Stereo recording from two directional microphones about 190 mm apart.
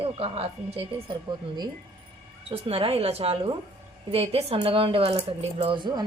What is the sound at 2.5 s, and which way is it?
A woman's voice, 30° right (ahead or behind).